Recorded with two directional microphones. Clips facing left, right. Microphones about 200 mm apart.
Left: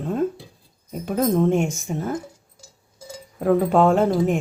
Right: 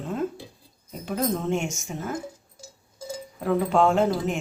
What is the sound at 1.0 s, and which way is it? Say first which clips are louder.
Speech: left 7 dB; 50° left (ahead or behind).